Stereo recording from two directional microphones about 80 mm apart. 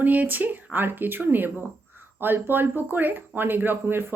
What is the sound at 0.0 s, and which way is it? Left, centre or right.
Speech, right.